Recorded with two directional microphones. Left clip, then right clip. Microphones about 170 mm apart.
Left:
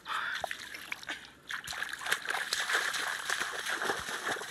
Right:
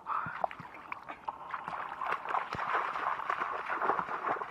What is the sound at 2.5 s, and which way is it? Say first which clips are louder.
Water: left 2 dB; 25° left (ahead or behind).